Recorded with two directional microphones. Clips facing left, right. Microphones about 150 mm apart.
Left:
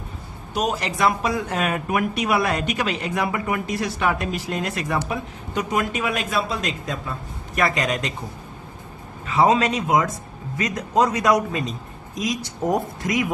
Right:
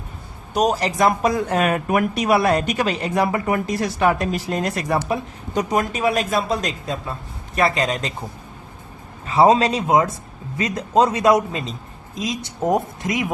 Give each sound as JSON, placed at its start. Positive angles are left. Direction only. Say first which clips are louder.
{"t": 0.5, "sound": "speech", "louder": "right 5 dB", "side_deg": -40}
{"t": 7.5, "sound": "a man's voice", "louder": "right 2 dB", "side_deg": -30}
{"t": 9.2, "sound": "a man's voice", "louder": "right 3 dB", "side_deg": -35}